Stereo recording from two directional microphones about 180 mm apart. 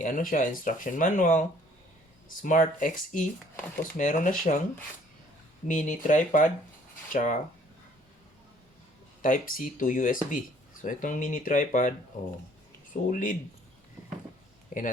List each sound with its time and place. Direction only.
0.0 s speech: 45° left (ahead or behind)
5.6 s speech: 45° left (ahead or behind)
9.2 s speech: 45° left (ahead or behind)
13.1 s speech: 45° left (ahead or behind)
14.7 s speech: 45° left (ahead or behind)